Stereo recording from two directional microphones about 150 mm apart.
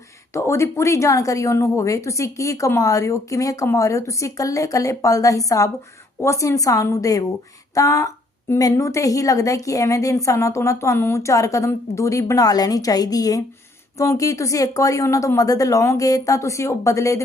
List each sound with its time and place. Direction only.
0.3 s a woman's voice: 20° left (ahead or behind)